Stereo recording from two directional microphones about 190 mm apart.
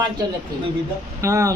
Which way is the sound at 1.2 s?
15° right (ahead or behind).